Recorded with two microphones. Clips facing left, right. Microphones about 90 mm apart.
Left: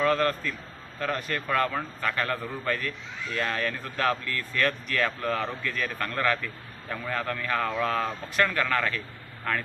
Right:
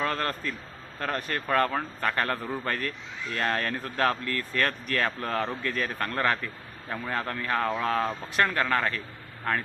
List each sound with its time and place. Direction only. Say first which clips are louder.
0.0 s speech: left 5 dB; 35° right (ahead or behind)